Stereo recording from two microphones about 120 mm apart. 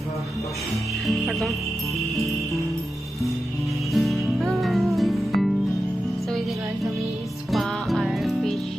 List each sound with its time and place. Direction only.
1.0 s jingle bell: centre (ahead or behind)
3.9 s music: centre (ahead or behind)
7.5 s music: centre (ahead or behind)